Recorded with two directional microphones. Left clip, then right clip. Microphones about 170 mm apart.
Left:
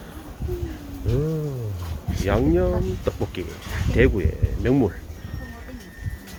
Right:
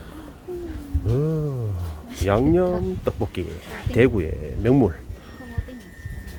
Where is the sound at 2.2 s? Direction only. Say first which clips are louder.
Right 2 dB; 25° right (ahead or behind).